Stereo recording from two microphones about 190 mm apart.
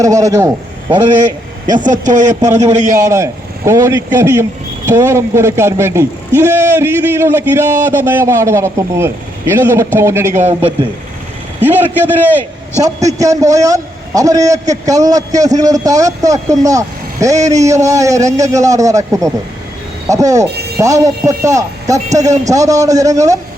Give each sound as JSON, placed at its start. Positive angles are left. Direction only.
{"t": 0.0, "sound": "a man's voice", "side_deg": -20}
{"t": 1.7, "sound": "speech", "side_deg": -40}
{"t": 3.0, "sound": "a man's voice", "side_deg": -15}
{"t": 11.6, "sound": "a man's voice", "side_deg": -10}